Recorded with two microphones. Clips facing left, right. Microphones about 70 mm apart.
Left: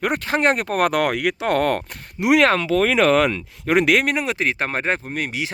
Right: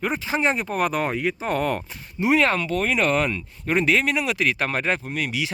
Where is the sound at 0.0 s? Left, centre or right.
Left.